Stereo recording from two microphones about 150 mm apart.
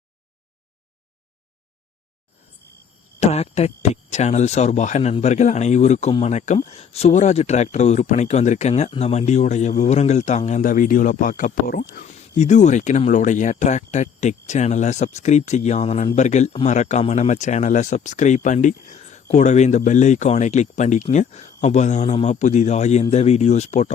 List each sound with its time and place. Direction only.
3.2 s speech: 45° left (ahead or behind); by 12.4 s 80° left
12.4 s speech: 50° left (ahead or behind)